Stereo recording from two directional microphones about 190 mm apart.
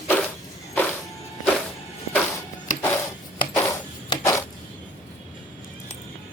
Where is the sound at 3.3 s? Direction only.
20° left (ahead or behind).